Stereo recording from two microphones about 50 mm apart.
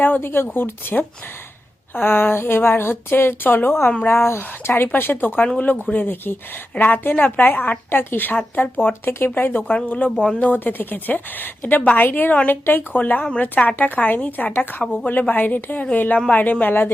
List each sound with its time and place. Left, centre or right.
0.0 s speech: left
5.5 s a woman's voice: left
8.8 s a woman's voice: left